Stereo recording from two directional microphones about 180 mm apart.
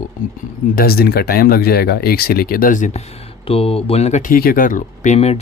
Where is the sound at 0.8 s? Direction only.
55° left (ahead or behind).